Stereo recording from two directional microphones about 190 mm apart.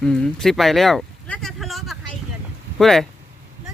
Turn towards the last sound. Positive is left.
turn(degrees=0)  # may be behind; listen again after turning